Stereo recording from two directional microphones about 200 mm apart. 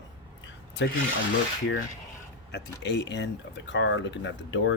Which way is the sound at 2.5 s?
60° left (ahead or behind).